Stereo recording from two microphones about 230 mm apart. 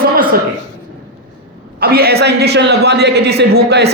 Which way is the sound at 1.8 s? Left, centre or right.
Right.